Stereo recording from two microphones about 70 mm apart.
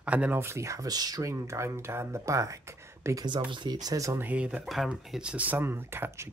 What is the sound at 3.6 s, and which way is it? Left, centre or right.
Speech, right.